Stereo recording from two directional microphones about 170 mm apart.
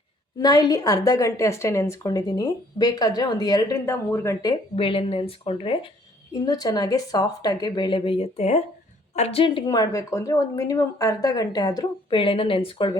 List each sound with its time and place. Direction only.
0.3 s a woman's voice: 20° left (ahead or behind)
4.7 s a woman's voice: 30° left (ahead or behind)
9.6 s a woman's voice: 20° left (ahead or behind)